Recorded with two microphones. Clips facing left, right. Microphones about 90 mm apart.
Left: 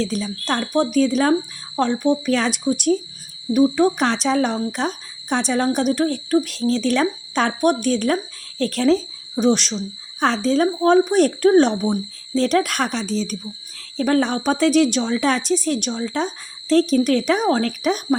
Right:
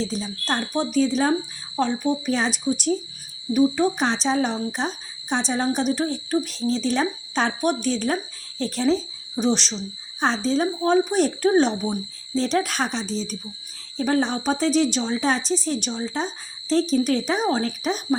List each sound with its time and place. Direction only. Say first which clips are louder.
0.0 s speech: left 4 dB; 65° left (ahead or behind)
9.4 s speech: left 5 dB; 50° left (ahead or behind)
10.2 s speech: left 4 dB; 60° left (ahead or behind)